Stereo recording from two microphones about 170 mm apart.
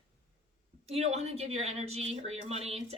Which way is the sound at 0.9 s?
40° right (ahead or behind).